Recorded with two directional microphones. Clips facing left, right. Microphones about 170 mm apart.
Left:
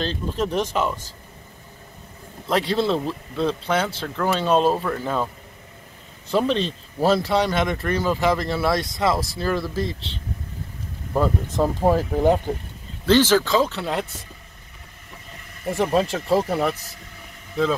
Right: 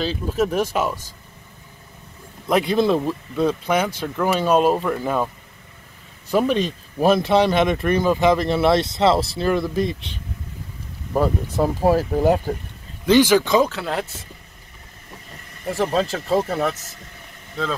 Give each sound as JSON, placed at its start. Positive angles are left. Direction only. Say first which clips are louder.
{"t": 0.0, "sound": "speech", "louder": "right 3 dB", "side_deg": -5}
{"t": 2.4, "sound": "speech", "louder": "right 3 dB", "side_deg": -15}
{"t": 6.3, "sound": "speech", "louder": "right 2 dB", "side_deg": -10}
{"t": 13.7, "sound": "speech", "louder": "even", "side_deg": 0}
{"t": 16.1, "sound": "speech", "louder": "even", "side_deg": 5}